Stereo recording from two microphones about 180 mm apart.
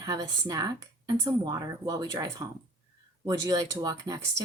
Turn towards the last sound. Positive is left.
turn(degrees=-20)  # may be behind; listen again after turning